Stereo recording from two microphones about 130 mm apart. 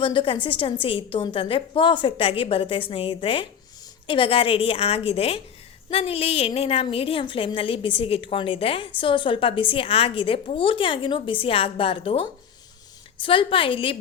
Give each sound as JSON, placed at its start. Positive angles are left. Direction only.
{"t": 0.0, "sound": "a woman's voice", "side_deg": 40}